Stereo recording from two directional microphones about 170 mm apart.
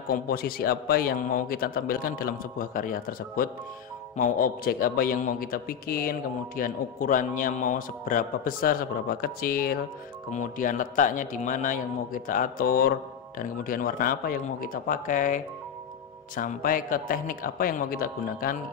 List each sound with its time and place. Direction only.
0.1 s a man's voice: 60° left (ahead or behind)
10.3 s a man's voice: 50° left (ahead or behind)